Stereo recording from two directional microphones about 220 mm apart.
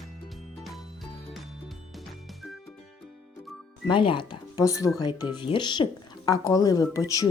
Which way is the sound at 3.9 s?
20° left (ahead or behind).